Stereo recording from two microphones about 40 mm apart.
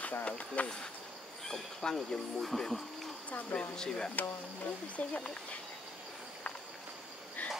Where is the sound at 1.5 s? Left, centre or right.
Centre.